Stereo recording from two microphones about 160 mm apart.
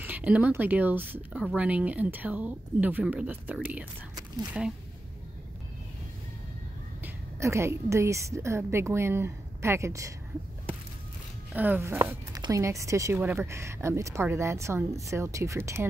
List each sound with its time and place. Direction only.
0.0 s speech: 10° right (ahead or behind)
7.0 s a woman's voice: 15° right (ahead or behind)
11.5 s speech: 10° right (ahead or behind)